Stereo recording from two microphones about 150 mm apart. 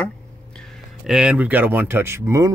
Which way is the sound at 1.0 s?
5° right (ahead or behind).